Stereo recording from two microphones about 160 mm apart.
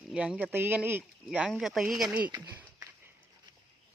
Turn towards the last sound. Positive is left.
turn(degrees=-10)  # may be behind; listen again after turning